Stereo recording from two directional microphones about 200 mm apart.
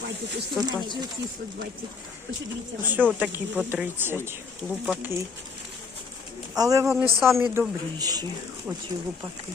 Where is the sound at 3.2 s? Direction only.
10° right (ahead or behind).